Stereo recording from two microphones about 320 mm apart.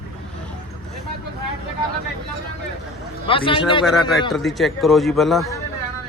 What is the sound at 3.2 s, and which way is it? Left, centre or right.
Speech, centre.